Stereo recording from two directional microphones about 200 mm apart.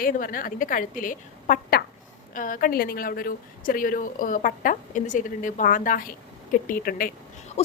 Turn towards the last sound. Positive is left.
turn(degrees=45)  # may be behind; listen again after turning